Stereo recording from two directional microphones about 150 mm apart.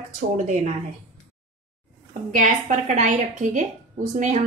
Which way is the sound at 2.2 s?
55° right (ahead or behind).